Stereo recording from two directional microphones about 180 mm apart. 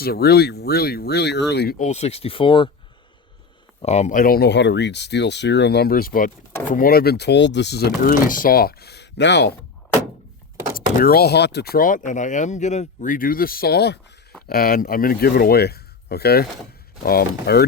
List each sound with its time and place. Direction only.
0.0 s speech: 60° left (ahead or behind)
1.8 s speech: 40° left (ahead or behind)
3.8 s speech: 40° left (ahead or behind); by 9.5 s 75° left (ahead or behind)
10.8 s speech: 55° left (ahead or behind)
14.4 s speech: 55° left (ahead or behind)